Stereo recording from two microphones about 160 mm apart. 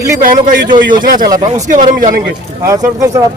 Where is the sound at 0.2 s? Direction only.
60° right (ahead or behind).